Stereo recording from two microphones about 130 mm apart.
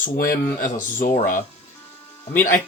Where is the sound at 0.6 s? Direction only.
90° left.